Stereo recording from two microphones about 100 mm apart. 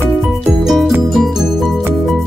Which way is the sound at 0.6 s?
Centre (ahead or behind).